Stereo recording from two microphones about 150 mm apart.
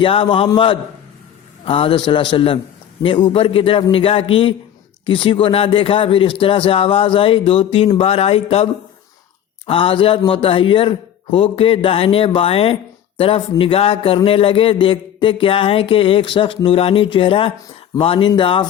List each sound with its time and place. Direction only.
0.0 s a man's voice: 35° left (ahead or behind)